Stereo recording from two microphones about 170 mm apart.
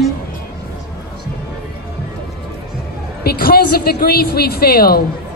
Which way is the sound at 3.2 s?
65° left (ahead or behind).